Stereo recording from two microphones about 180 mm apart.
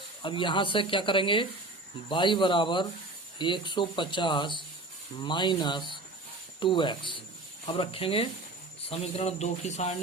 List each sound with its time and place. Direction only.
0.2 s speech: 25° left (ahead or behind)